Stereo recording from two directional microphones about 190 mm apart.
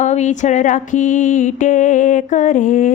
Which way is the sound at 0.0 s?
40° left (ahead or behind).